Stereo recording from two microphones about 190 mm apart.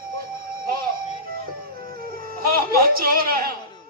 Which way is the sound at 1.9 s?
50° right (ahead or behind).